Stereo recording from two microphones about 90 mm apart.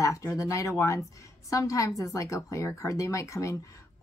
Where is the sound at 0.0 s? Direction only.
35° left (ahead or behind).